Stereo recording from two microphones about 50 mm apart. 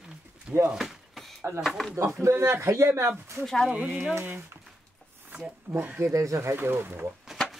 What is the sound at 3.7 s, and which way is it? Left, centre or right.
Speech, right.